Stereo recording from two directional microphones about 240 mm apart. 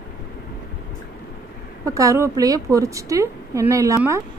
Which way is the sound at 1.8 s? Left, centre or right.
Centre.